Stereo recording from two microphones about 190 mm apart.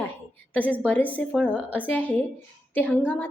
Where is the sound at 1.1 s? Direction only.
5° left (ahead or behind).